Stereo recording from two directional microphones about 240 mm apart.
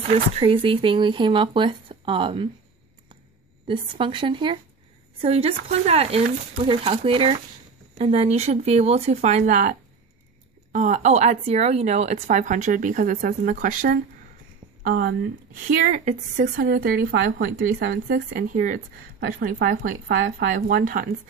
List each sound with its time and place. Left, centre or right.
0.1 s speech: right
3.6 s speech: right
20.2 s speech: right